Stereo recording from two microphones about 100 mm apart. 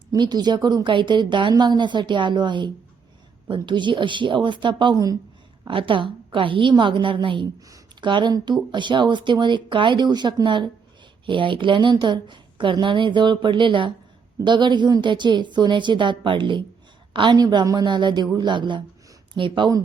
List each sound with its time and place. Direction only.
0.1 s a woman's voice: 45° right (ahead or behind)
17.3 s speech: 45° right (ahead or behind)